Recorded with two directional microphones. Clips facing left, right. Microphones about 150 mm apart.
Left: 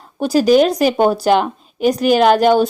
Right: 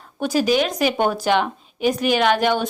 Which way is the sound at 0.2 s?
35° left (ahead or behind).